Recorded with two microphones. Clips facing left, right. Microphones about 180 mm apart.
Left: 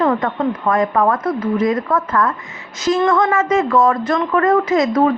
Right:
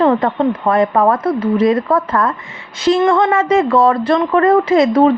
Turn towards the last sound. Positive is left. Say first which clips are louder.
# right 4 dB
turn(degrees=-30)  # may be behind; listen again after turning